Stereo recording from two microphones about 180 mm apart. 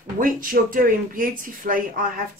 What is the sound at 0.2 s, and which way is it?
Speech, 50° right (ahead or behind).